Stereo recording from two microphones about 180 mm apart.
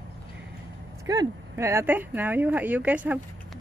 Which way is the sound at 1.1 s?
20° right (ahead or behind).